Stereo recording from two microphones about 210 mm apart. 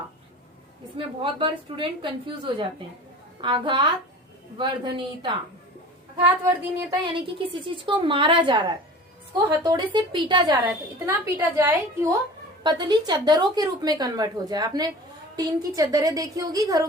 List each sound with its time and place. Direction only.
0.9 s a woman's voice: 25° right (ahead or behind)
9.6 s a woman's voice: 20° right (ahead or behind)
11.0 s a woman's voice: 10° right (ahead or behind)
12.6 s a woman's voice: 20° right (ahead or behind)